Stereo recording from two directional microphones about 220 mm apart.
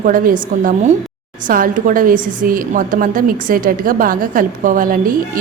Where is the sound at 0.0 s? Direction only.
40° right (ahead or behind).